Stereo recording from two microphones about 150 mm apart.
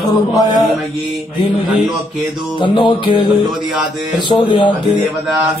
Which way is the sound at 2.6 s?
30° left (ahead or behind).